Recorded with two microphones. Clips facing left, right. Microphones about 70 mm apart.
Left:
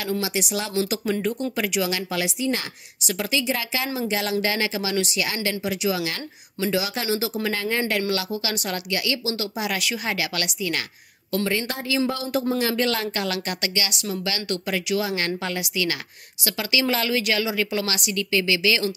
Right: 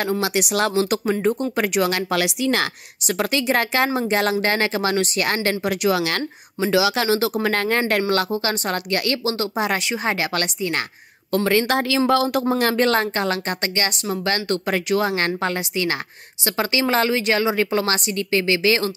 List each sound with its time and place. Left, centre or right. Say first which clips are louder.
0.2 s a woman's voice: right 6 dB; right
3.1 s speech: right 4 dB; right
7.4 s speech: right 4 dB; right
11.4 s speech: right 10 dB; right